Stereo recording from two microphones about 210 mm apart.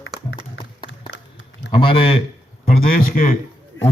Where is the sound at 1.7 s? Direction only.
25° left (ahead or behind).